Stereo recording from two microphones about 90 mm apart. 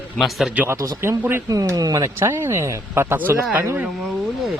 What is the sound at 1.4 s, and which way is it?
A man's voice, 45° right (ahead or behind).